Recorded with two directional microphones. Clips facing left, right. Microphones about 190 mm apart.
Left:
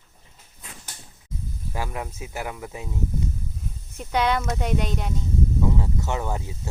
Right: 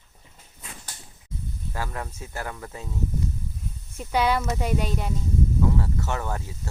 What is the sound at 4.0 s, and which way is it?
Speech, 5° right (ahead or behind).